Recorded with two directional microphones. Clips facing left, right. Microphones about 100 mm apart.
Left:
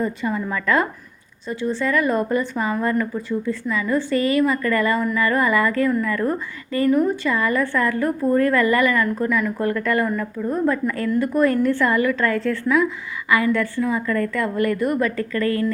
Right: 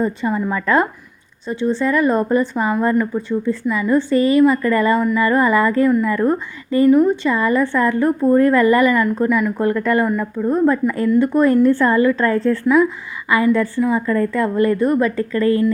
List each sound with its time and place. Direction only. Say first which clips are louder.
0.0 s speech: right 4 dB; 30° right (ahead or behind)
10.4 s a woman's voice: right 5 dB; 35° right (ahead or behind)